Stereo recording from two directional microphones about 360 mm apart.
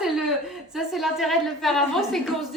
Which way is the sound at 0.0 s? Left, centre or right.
Centre.